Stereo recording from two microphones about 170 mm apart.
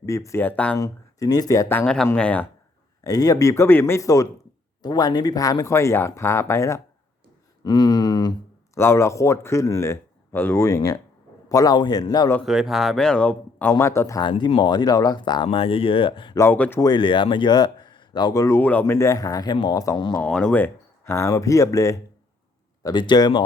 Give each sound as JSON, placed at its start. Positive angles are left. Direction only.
{"t": 0.0, "sound": "speech", "side_deg": 20}
{"t": 0.8, "sound": "speech", "side_deg": 20}
{"t": 1.8, "sound": "speech", "side_deg": 5}
{"t": 3.0, "sound": "speech", "side_deg": 20}
{"t": 12.3, "sound": "speech", "side_deg": 0}
{"t": 16.4, "sound": "speech", "side_deg": 10}
{"t": 16.9, "sound": "speech", "side_deg": 30}
{"t": 20.2, "sound": "speech", "side_deg": 5}